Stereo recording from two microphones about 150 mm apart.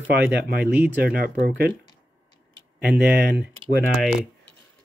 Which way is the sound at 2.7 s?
85° right.